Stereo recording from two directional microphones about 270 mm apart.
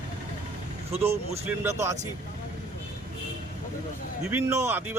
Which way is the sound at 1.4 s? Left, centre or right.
Centre.